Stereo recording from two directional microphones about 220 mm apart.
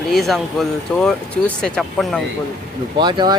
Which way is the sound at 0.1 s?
Centre (ahead or behind).